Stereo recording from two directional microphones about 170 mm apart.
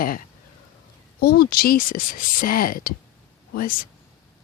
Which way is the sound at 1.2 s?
65° left (ahead or behind).